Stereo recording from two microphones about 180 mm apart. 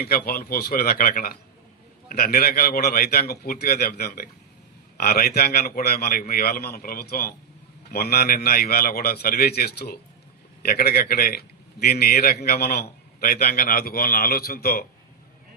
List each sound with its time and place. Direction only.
0.0 s a man's voice: 55° left (ahead or behind)